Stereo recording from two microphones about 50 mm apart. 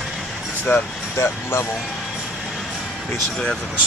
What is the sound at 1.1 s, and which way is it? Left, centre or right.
Speech, left.